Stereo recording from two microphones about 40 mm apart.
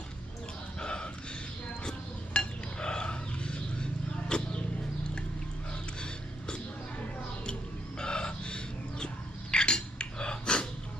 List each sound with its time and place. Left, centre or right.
0.8 s dog: left
1.8 s a sound: left
7.9 s chicken: left
9.5 s cutlery: left